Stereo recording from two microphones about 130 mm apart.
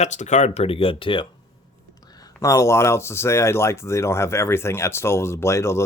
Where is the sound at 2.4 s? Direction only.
25° left (ahead or behind).